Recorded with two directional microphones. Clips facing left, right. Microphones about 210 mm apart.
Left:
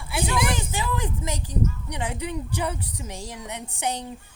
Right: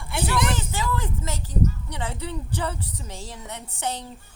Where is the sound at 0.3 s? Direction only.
10° left (ahead or behind).